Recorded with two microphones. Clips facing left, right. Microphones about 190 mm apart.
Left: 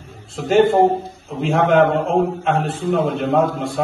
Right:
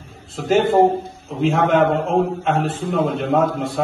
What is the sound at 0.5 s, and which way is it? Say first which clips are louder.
A man's voice: left 1 dB; centre (ahead or behind).